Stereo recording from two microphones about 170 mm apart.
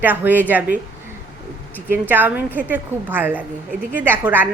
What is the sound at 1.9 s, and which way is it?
A woman's voice, 10° right (ahead or behind).